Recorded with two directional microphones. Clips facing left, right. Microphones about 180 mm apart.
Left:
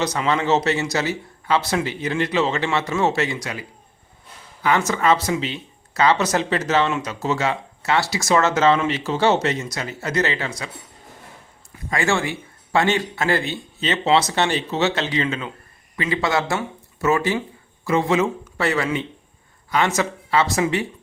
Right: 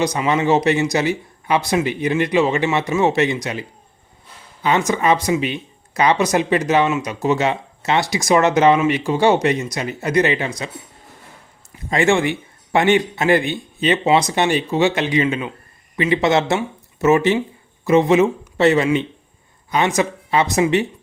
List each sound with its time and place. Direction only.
0.0 s speech: 15° right (ahead or behind)
11.9 s speech: 20° right (ahead or behind)